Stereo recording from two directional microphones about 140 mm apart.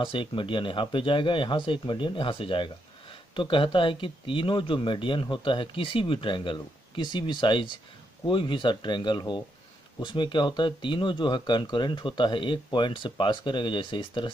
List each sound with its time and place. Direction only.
0.0 s speech: 35° left (ahead or behind)